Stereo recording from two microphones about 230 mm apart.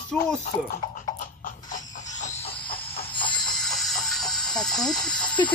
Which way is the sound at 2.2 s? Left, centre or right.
Left.